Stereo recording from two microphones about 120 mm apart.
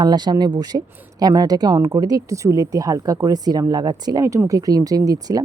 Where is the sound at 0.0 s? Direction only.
35° right (ahead or behind).